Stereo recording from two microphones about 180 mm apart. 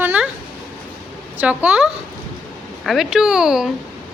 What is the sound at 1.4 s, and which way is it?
A woman's voice, 5° right (ahead or behind).